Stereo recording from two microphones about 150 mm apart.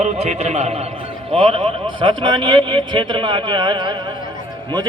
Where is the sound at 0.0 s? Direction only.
45° right (ahead or behind).